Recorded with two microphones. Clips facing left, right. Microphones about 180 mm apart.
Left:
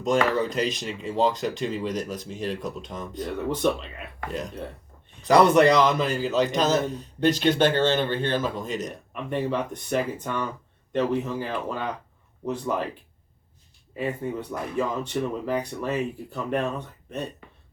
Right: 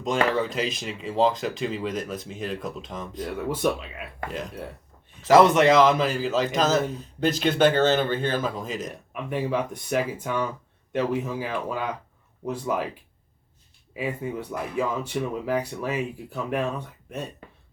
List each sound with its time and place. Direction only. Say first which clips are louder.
0.0 s a man's voice: left 1 dB; centre (ahead or behind)
13.9 s speech: left 1 dB; 5° right (ahead or behind)